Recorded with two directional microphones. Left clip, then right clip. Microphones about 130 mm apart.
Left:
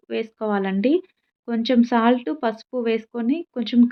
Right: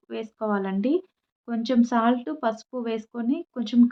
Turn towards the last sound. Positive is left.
turn(degrees=15)  # may be behind; listen again after turning